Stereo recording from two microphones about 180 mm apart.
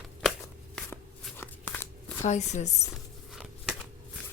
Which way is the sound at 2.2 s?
40° left (ahead or behind).